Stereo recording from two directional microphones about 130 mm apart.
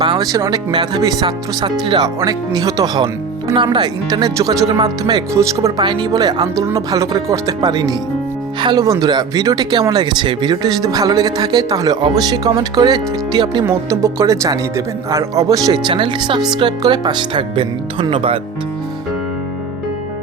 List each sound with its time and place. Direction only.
0.0 s speech: 30° right (ahead or behind)
13.7 s speech: 20° right (ahead or behind)
15.9 s speech: 40° right (ahead or behind)